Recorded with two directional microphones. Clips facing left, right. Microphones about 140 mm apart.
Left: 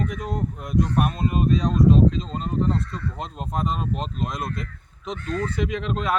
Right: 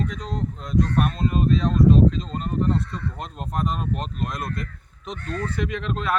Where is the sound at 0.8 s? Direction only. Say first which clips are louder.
Even; 15° left (ahead or behind).